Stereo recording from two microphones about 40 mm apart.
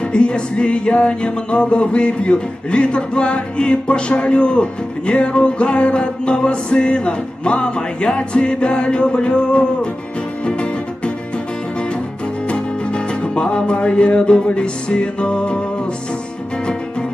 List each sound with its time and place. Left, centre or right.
0.1 s music: left
12.4 s music: left